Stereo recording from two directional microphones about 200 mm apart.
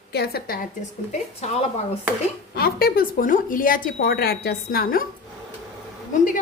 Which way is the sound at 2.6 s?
50° left (ahead or behind).